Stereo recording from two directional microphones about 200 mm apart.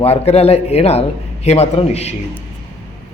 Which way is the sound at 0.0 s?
30° left (ahead or behind).